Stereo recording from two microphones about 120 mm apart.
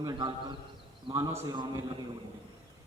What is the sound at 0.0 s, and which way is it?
A man's voice, 35° right (ahead or behind).